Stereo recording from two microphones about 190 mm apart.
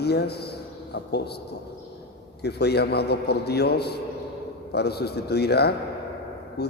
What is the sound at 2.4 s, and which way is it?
A man's voice, 60° left (ahead or behind).